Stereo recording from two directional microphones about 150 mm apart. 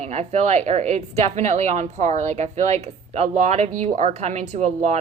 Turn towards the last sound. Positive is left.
turn(degrees=-50)  # may be behind; listen again after turning